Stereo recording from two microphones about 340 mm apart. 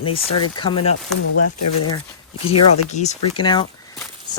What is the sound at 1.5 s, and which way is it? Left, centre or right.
Speech, left.